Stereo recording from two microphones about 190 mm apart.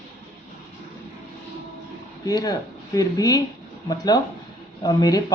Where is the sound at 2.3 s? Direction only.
20° left (ahead or behind).